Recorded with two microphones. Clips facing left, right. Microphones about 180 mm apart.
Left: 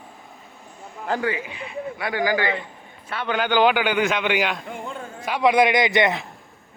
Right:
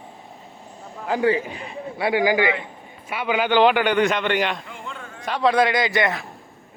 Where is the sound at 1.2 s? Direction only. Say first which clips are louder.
Right 6 dB; 35° right (ahead or behind).